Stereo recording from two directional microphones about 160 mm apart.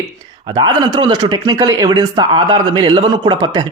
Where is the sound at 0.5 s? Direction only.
25° right (ahead or behind).